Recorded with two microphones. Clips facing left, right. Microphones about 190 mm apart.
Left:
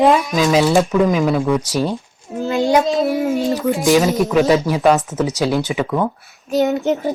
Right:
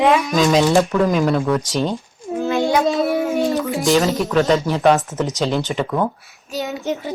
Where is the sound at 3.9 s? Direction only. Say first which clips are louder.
Left 2 dB; 15° left (ahead or behind).